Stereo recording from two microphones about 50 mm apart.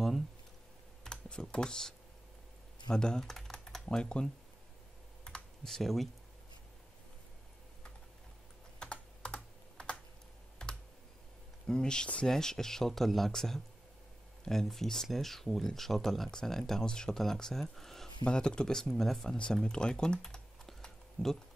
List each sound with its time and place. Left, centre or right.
1.0 s speech: centre
2.9 s typing: centre
4.0 s speech: centre
5.2 s computer keyboard: centre
8.7 s computer keyboard: left
11.6 s speech: centre
18.2 s speech: centre
18.9 s speech: centre
19.2 s speech: centre